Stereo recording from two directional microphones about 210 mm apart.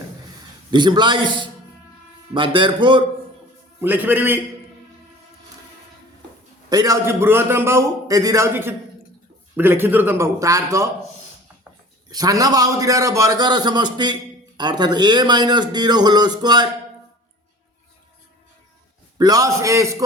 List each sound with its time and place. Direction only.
0.7 s a man's voice: 20° right (ahead or behind)
3.8 s a man's voice: 10° right (ahead or behind)
6.7 s a man's voice: 15° right (ahead or behind)
12.0 s a man's voice: 15° right (ahead or behind)
19.2 s a man's voice: 15° right (ahead or behind)